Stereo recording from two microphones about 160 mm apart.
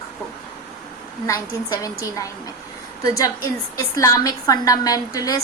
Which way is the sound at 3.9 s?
20° left (ahead or behind).